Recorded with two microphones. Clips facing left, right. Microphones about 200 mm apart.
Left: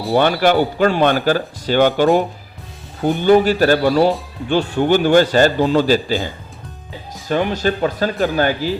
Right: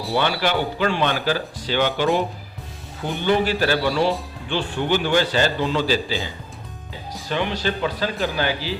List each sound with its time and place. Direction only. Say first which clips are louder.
0.1 s a man's voice: left 8 dB; 50° left (ahead or behind)
3.2 s a man's voice: left 7 dB; 45° left (ahead or behind)
7.3 s a man's voice: left 6 dB; 45° left (ahead or behind)